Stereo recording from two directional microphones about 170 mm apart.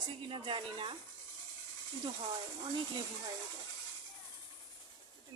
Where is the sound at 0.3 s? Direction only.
30° right (ahead or behind).